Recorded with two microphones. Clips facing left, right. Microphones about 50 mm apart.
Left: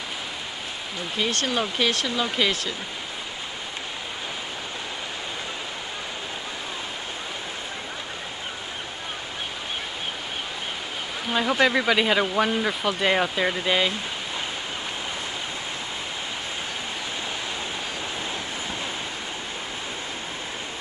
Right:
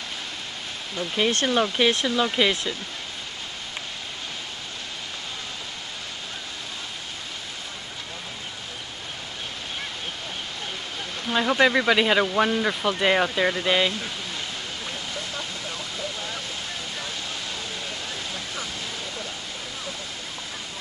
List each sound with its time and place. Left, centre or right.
1.2 s speech: centre
11.3 s speech: centre